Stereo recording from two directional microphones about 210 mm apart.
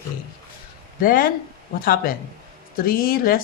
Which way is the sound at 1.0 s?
40° left (ahead or behind).